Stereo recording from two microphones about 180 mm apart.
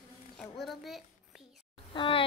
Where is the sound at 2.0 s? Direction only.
30° left (ahead or behind).